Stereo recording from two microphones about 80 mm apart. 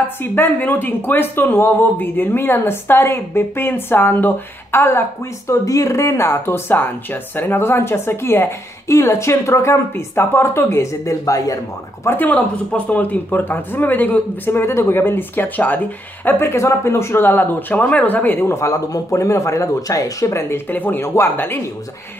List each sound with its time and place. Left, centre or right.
0.2 s speech: left
12.1 s speech: left
18.5 s speech: left